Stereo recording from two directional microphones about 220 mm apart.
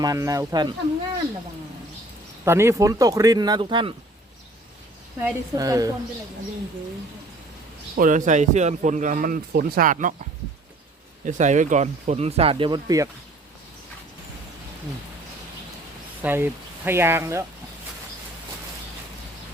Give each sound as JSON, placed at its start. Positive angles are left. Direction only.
{"t": 0.0, "sound": "speech", "side_deg": -15}
{"t": 2.4, "sound": "speech", "side_deg": -10}
{"t": 5.2, "sound": "speech", "side_deg": -15}
{"t": 7.9, "sound": "a man's voice", "side_deg": -35}
{"t": 11.3, "sound": "speech", "side_deg": -35}
{"t": 16.2, "sound": "speech", "side_deg": -10}